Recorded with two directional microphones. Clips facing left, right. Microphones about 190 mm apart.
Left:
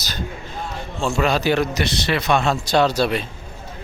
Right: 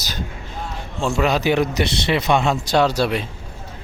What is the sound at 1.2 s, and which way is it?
Speech, 15° right (ahead or behind).